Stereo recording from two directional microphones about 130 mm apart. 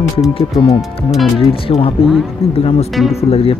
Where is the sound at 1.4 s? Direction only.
45° left (ahead or behind).